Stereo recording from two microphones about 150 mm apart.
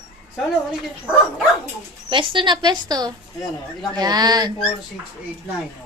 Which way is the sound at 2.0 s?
35° right (ahead or behind).